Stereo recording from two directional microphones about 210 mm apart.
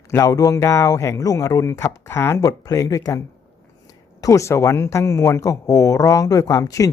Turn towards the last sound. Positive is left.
turn(degrees=15)  # may be behind; listen again after turning